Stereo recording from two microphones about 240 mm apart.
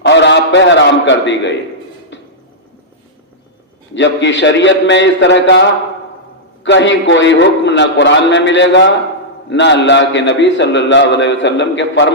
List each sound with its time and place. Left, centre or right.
0.0 s a man's voice: left
3.9 s a man's voice: left